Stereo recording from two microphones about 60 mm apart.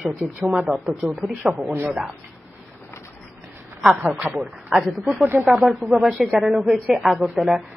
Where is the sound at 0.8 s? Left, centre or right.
Centre.